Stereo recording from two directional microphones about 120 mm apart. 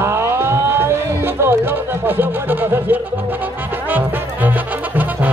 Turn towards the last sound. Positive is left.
turn(degrees=-15)  # may be behind; listen again after turning